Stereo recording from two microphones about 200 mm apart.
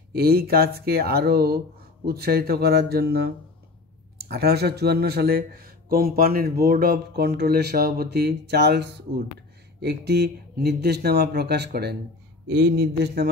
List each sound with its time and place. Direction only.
0.1 s speech: 50° right (ahead or behind)
4.3 s speech: 55° right (ahead or behind)